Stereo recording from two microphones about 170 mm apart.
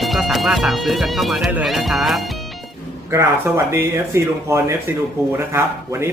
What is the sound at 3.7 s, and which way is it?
Speech, 15° right (ahead or behind).